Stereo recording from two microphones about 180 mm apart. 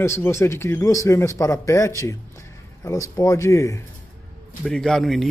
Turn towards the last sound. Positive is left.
turn(degrees=0)  # may be behind; listen again after turning